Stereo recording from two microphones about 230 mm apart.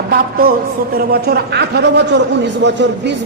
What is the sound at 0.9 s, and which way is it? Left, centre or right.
Speech, right.